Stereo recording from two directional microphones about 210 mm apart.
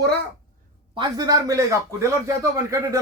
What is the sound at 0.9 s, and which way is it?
A man's voice, 20° right (ahead or behind).